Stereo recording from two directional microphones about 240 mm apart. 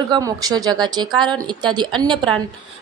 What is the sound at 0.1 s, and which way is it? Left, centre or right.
Speech, centre.